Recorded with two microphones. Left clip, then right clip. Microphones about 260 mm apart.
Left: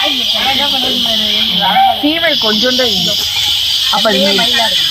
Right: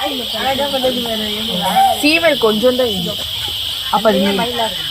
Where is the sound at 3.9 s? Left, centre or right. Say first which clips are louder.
Even; right.